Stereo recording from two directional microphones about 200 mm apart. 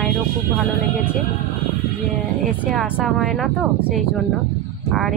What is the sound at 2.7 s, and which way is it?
Speech, centre (ahead or behind).